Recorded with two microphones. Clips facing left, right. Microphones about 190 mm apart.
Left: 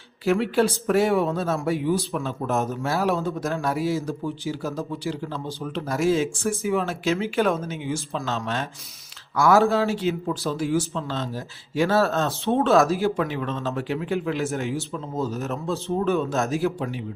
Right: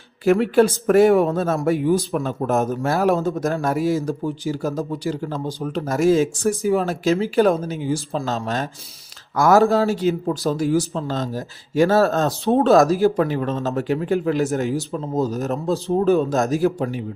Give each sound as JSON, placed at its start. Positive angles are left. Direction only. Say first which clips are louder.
{"t": 0.3, "sound": "a man's voice", "louder": "right 5 dB", "side_deg": -50}